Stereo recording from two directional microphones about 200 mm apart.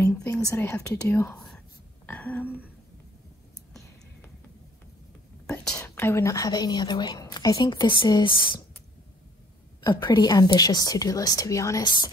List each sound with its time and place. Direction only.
0.0 s whispering: 10° left (ahead or behind)
0.6 s speech: 10° left (ahead or behind)
5.5 s speech: 5° left (ahead or behind); by 8.6 s 25° left (ahead or behind)
9.8 s speech: 20° left (ahead or behind)